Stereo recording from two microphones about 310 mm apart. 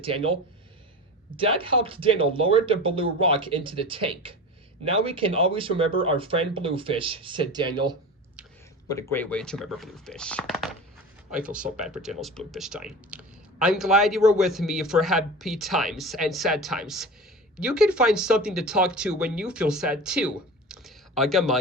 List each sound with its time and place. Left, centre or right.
0.0 s speech: centre
1.4 s speech: centre
8.9 s speech: centre